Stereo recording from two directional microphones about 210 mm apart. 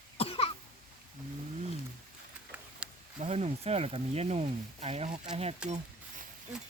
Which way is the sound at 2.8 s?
5° right (ahead or behind).